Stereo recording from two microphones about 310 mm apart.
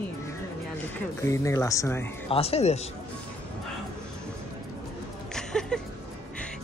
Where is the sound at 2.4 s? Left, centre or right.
Centre.